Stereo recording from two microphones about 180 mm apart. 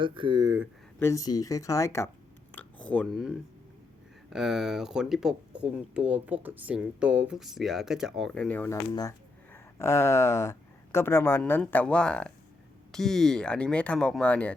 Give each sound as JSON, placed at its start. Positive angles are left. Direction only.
{"t": 0.0, "sound": "speech", "side_deg": -30}
{"t": 0.9, "sound": "speech", "side_deg": 15}
{"t": 2.6, "sound": "chewing", "side_deg": 10}
{"t": 4.3, "sound": "speech", "side_deg": 0}